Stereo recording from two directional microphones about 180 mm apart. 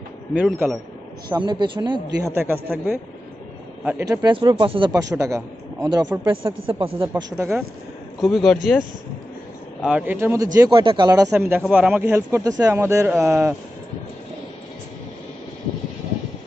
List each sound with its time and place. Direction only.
0.3 s speech: 5° right (ahead or behind)
1.3 s speech: 25° right (ahead or behind)
2.3 s speech: 10° right (ahead or behind); by 7.2 s 30° right (ahead or behind)
7.3 s speech: 15° right (ahead or behind)
8.2 s speech: centre (ahead or behind); by 13.6 s 15° right (ahead or behind)